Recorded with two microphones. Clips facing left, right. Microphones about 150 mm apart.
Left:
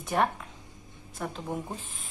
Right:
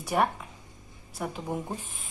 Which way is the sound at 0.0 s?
5° right (ahead or behind).